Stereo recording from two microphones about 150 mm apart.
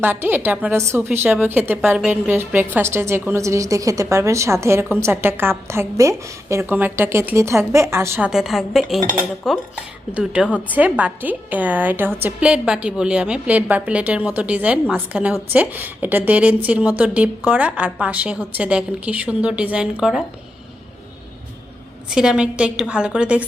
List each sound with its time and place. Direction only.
0.0 s a woman's voice: 15° right (ahead or behind)
8.3 s a woman's voice: centre (ahead or behind)
22.1 s a woman's voice: 5° right (ahead or behind)